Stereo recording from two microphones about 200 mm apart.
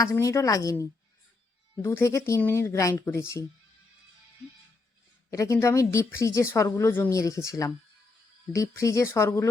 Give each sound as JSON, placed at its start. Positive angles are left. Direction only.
{"t": 0.0, "sound": "a woman's voice", "side_deg": 15}
{"t": 5.3, "sound": "a woman's voice", "side_deg": 15}